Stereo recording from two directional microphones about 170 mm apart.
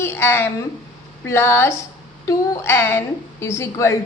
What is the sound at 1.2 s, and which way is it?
A woman's voice, 15° left (ahead or behind).